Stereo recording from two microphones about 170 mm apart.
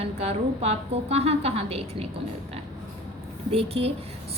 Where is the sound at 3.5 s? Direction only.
35° right (ahead or behind).